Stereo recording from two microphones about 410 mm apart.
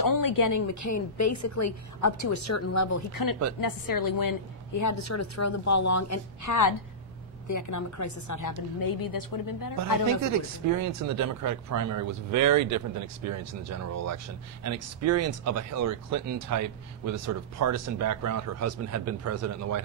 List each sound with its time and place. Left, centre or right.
0.0 s a woman's voice: left
3.2 s a woman's voice: left
10.2 s speech: right